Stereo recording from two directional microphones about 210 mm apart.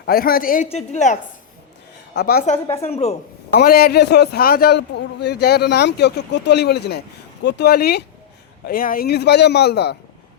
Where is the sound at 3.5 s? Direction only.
45° left (ahead or behind).